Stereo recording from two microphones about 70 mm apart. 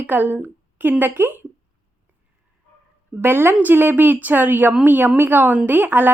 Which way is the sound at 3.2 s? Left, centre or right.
Right.